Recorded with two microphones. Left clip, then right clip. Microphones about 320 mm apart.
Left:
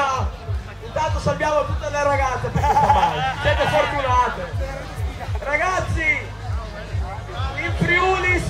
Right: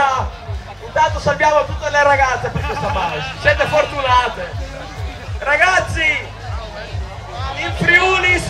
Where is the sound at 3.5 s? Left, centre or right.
Right.